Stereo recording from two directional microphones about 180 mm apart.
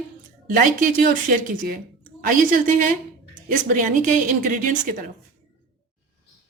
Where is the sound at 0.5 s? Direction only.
50° right (ahead or behind).